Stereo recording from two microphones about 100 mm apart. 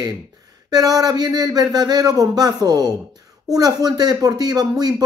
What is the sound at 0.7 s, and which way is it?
Speech, 40° right (ahead or behind).